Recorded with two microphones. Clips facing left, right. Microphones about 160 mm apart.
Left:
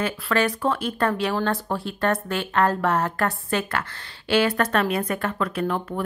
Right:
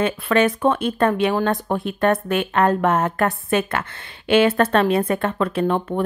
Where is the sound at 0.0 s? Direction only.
20° right (ahead or behind).